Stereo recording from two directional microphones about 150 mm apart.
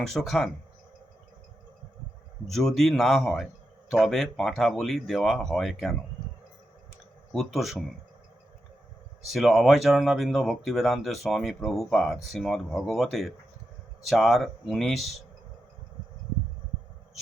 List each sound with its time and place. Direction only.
0.0 s speech: centre (ahead or behind)
2.5 s speech: centre (ahead or behind)
7.3 s speech: centre (ahead or behind)
9.2 s speech: centre (ahead or behind)